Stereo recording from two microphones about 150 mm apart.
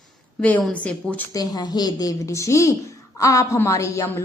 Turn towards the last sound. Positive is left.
turn(degrees=20)  # may be behind; listen again after turning